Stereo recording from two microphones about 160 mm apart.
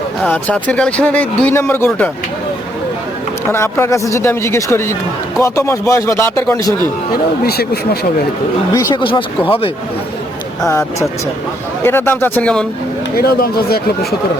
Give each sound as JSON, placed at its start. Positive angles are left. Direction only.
{"t": 0.3, "sound": "speech", "side_deg": 10}
{"t": 3.5, "sound": "speech", "side_deg": 15}
{"t": 7.1, "sound": "speech", "side_deg": 75}
{"t": 8.7, "sound": "speech", "side_deg": 25}
{"t": 11.8, "sound": "speech", "side_deg": 15}
{"t": 13.1, "sound": "speech", "side_deg": 75}